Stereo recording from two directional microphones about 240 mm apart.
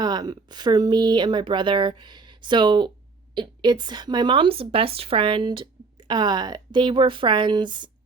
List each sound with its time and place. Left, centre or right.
0.0 s a woman's voice: centre